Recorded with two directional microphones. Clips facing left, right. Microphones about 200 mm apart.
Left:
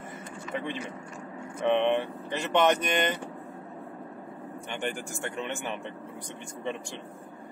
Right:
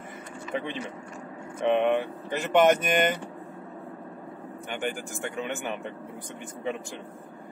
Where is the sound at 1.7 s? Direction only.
10° right (ahead or behind).